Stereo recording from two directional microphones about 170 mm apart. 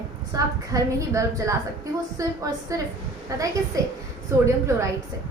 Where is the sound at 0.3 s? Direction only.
20° right (ahead or behind).